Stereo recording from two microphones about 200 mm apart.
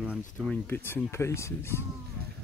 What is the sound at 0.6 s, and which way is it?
Speech, 10° left (ahead or behind).